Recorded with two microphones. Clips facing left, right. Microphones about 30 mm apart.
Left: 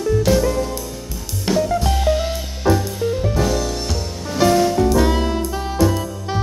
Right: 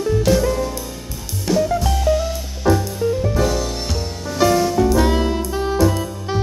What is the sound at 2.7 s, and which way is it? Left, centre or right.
Music, centre.